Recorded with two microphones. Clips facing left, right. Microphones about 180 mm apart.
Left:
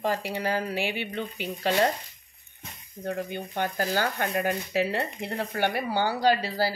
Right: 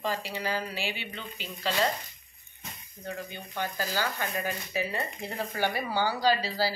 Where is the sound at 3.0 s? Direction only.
50° left (ahead or behind).